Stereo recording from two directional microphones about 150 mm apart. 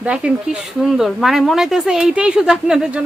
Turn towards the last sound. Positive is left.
turn(degrees=-5)  # may be behind; listen again after turning